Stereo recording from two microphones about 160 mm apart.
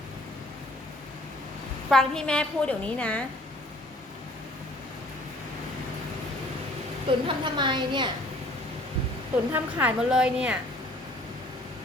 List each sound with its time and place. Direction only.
1.9 s a woman's voice: 5° left (ahead or behind)
7.3 s a woman's voice: 30° right (ahead or behind)
9.5 s a woman's voice: 10° right (ahead or behind)